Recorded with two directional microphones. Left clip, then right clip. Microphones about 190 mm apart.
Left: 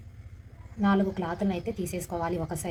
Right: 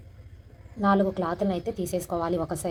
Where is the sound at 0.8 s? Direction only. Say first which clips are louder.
Right 4 dB; 30° right (ahead or behind).